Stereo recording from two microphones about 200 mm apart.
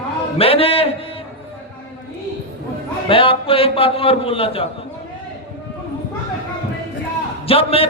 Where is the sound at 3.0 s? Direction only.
25° left (ahead or behind).